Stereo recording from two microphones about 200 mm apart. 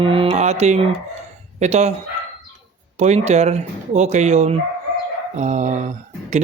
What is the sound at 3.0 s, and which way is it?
Speech, 35° right (ahead or behind).